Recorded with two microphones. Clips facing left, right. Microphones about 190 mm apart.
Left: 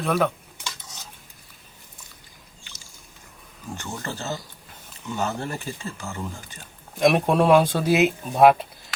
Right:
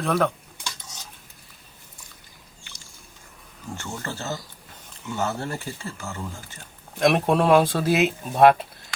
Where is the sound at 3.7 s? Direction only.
15° left (ahead or behind).